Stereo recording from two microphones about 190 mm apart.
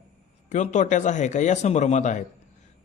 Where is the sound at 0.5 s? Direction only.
40° left (ahead or behind).